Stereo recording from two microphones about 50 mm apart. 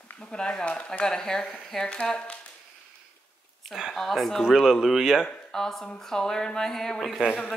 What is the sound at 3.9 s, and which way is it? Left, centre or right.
Speech, centre.